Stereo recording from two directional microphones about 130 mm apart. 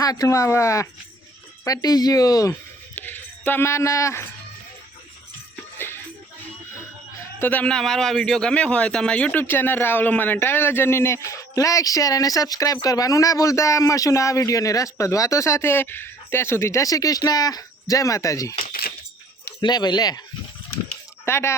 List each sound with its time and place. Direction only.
0.0 s a man's voice: 30° left (ahead or behind)
2.5 s a sound: 15° left (ahead or behind)
5.7 s music: 15° left (ahead or behind)
7.3 s a man's voice: 10° left (ahead or behind)
19.6 s speech: 35° left (ahead or behind)
21.2 s speech: 20° left (ahead or behind)